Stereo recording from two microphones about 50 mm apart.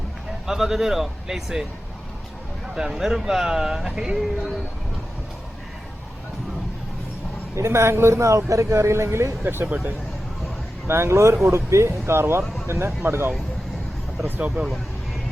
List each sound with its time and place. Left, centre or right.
0.4 s speech: centre
2.7 s speech: centre
7.5 s a man's voice: right
9.6 s speech: right
10.8 s speech: right
14.3 s speech: right